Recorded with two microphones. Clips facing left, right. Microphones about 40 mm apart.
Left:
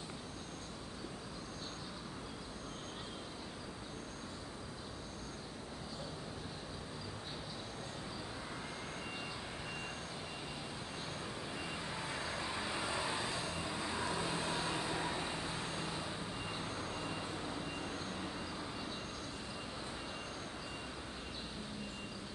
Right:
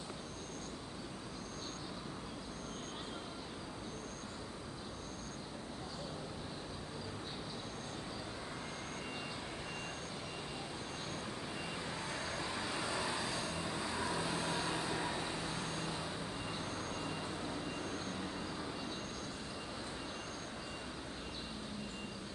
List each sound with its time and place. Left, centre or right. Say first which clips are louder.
12.1 s vehicle: even; centre
13.6 s vehicle: even; centre
15.9 s vehicle: even; centre
16.5 s vehicle: even; left
17.0 s vehicle: even; centre